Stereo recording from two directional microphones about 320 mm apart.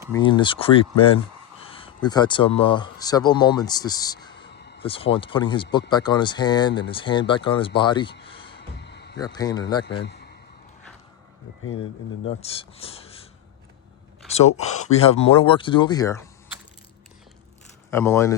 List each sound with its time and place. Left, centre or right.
0.1 s speech: centre
4.5 s a sound: left
4.8 s speech: centre
8.2 s music: centre
8.5 s music: left
9.1 s speech: centre
10.0 s a sound: left
12.4 s speech: centre
14.9 s speech: centre
17.9 s speech: centre